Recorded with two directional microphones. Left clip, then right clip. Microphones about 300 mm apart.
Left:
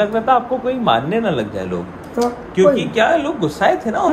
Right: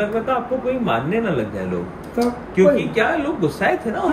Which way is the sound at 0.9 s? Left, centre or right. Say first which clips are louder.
Left 8 dB; left.